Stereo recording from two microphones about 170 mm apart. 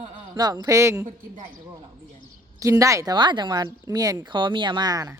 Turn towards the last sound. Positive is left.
turn(degrees=-20)  # may be behind; listen again after turning